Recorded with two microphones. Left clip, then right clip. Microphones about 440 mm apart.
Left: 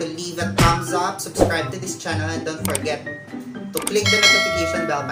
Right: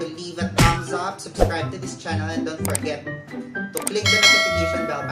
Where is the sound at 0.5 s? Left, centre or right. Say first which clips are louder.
Left 2 dB; centre.